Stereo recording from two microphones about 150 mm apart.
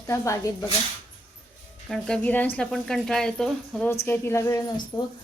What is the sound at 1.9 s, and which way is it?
A woman's voice, 5° left (ahead or behind).